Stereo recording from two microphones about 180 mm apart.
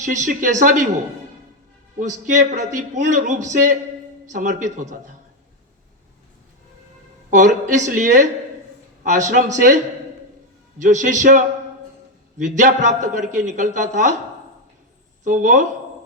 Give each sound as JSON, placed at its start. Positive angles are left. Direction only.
{"t": 0.0, "sound": "a man's voice", "side_deg": -45}
{"t": 2.0, "sound": "a man's voice", "side_deg": -45}
{"t": 7.3, "sound": "a man's voice", "side_deg": -45}
{"t": 10.8, "sound": "a man's voice", "side_deg": -45}
{"t": 15.2, "sound": "a woman's voice", "side_deg": -45}